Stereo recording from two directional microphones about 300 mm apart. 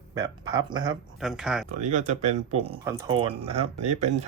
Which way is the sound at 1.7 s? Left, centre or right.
Right.